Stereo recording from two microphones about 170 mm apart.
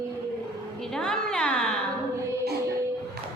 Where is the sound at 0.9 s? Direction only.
5° left (ahead or behind).